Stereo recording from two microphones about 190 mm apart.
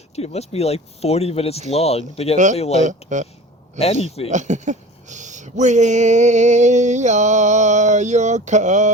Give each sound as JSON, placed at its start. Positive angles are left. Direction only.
{"t": 0.2, "sound": "speech", "side_deg": 35}
{"t": 2.8, "sound": "speech", "side_deg": -40}
{"t": 4.3, "sound": "speech", "side_deg": -40}